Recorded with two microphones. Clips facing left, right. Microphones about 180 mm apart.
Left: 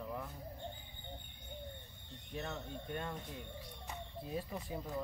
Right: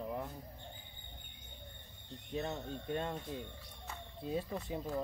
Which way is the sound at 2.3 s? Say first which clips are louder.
Right 4 dB; 25° right (ahead or behind).